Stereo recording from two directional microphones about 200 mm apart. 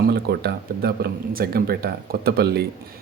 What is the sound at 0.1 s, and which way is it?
Speech, 55° right (ahead or behind).